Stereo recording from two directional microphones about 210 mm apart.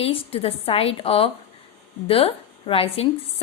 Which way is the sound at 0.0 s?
25° left (ahead or behind).